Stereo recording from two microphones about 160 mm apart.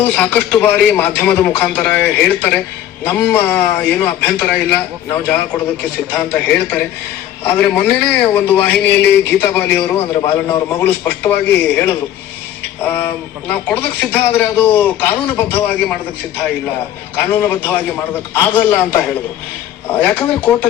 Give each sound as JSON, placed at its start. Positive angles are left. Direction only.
{"t": 0.0, "sound": "a man's voice", "side_deg": 10}
{"t": 17.3, "sound": "a man's voice", "side_deg": 10}